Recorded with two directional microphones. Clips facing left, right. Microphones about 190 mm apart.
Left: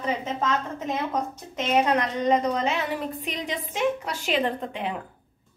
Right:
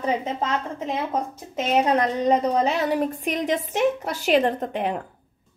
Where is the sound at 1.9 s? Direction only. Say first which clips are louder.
Right 2 dB; 35° right (ahead or behind).